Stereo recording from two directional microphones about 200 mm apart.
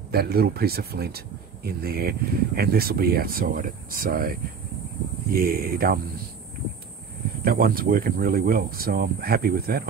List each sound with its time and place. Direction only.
0.1 s speech: 50° right (ahead or behind)
7.4 s speech: 45° right (ahead or behind)